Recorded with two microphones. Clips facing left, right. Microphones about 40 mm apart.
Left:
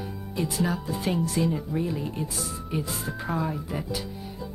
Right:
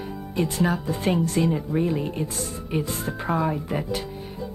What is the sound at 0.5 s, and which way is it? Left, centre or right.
Speech, right.